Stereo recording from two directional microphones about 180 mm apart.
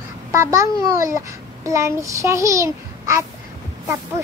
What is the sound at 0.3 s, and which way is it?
Speech, 15° right (ahead or behind).